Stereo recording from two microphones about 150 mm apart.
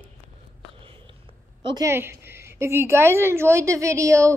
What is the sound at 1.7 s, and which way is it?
A woman's voice, 20° right (ahead or behind).